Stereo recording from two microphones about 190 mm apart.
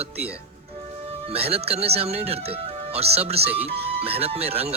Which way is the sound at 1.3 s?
30° right (ahead or behind).